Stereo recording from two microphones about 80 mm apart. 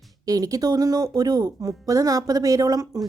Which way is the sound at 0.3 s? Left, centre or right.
Right.